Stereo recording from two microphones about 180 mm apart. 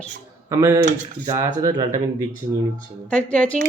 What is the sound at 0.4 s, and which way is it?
Speech, 15° right (ahead or behind).